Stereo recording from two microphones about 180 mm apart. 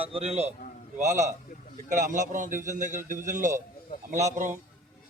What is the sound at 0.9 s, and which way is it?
A man's voice, 40° right (ahead or behind).